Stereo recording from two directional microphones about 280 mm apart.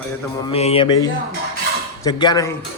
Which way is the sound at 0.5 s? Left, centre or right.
Left.